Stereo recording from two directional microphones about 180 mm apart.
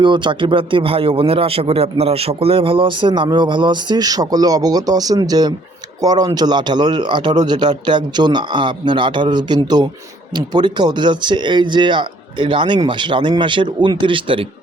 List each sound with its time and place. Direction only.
0.0 s speech: 25° right (ahead or behind)